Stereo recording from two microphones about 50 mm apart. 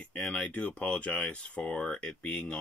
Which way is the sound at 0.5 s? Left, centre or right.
Left.